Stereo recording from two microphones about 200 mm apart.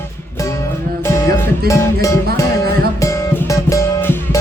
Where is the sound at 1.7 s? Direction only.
15° left (ahead or behind).